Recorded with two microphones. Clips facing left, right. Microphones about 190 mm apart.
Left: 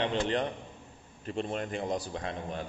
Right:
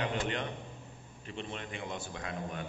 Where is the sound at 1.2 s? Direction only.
40° left (ahead or behind).